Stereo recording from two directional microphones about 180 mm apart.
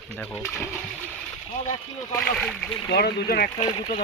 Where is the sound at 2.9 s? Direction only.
60° left (ahead or behind).